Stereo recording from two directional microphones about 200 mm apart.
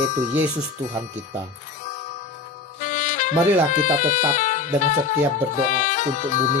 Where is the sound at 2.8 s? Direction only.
40° left (ahead or behind).